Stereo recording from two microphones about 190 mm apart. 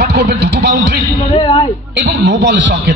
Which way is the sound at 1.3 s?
25° left (ahead or behind).